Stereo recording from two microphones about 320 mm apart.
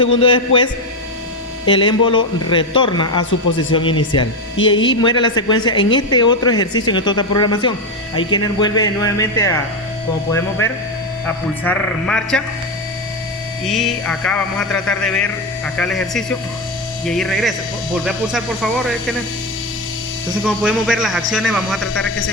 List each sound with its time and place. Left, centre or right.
0.2 s a woman's voice: centre
11.6 s speech: centre
13.7 s speech: centre
20.4 s speech: centre
21.9 s speech: left